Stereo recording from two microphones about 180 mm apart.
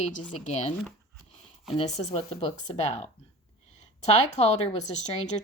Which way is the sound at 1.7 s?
35° left (ahead or behind).